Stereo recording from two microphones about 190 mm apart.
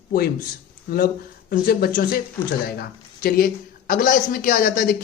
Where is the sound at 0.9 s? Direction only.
50° left (ahead or behind).